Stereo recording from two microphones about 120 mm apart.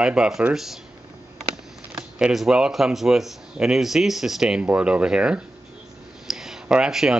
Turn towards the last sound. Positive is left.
turn(degrees=-5)  # may be behind; listen again after turning